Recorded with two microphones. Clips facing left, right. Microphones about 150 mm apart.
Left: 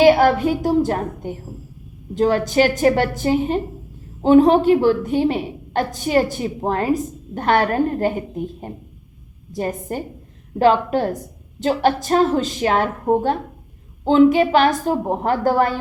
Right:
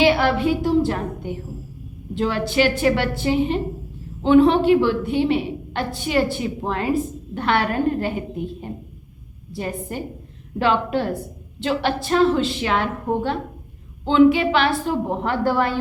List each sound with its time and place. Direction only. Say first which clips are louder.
0.0 s a woman's voice: left 4 dB; 45° left (ahead or behind)